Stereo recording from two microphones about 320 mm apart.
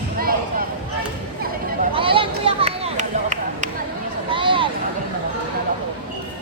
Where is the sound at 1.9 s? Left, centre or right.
Centre.